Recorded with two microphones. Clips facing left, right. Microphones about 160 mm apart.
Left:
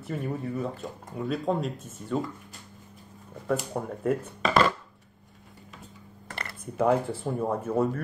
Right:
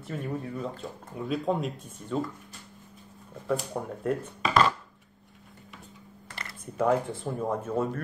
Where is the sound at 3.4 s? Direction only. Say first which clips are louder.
Left 1 dB; 5° left (ahead or behind).